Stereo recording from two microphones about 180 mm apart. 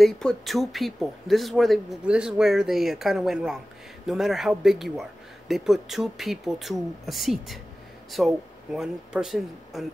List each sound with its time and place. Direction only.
0.0 s speech: centre (ahead or behind)